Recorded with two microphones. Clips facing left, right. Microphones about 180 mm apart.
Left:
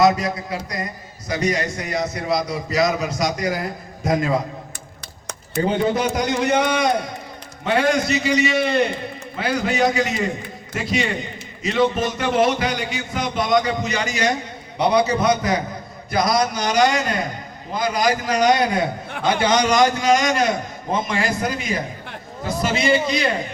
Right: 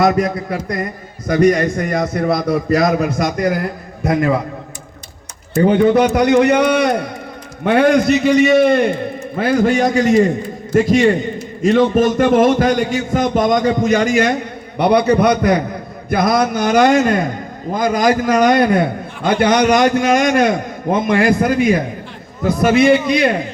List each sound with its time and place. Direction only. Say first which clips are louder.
0.0 s a man's voice: right 3 dB; 55° right (ahead or behind)
5.6 s a man's voice: right 9 dB; 60° right (ahead or behind)